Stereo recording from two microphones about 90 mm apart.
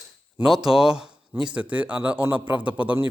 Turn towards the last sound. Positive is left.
turn(degrees=-15)  # may be behind; listen again after turning